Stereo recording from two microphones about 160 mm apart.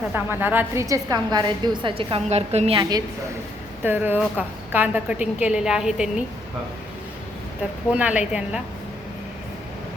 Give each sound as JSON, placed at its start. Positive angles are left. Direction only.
{"t": 0.1, "sound": "a woman's voice", "side_deg": -10}
{"t": 3.8, "sound": "a woman's voice", "side_deg": -10}
{"t": 7.9, "sound": "a woman's voice", "side_deg": -10}